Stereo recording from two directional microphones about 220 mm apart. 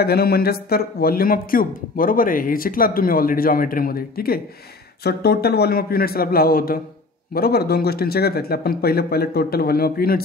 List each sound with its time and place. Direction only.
0.0 s speech: 45° left (ahead or behind)